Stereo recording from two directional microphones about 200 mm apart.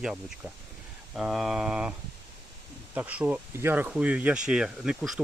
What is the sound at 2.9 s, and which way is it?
Speech, 5° right (ahead or behind).